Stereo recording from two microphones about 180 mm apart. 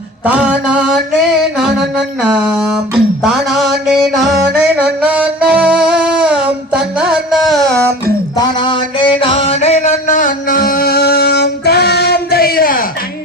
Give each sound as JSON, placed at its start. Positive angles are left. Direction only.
{"t": 0.3, "sound": "mantra", "side_deg": -5}
{"t": 3.2, "sound": "music", "side_deg": 0}
{"t": 8.0, "sound": "music", "side_deg": 25}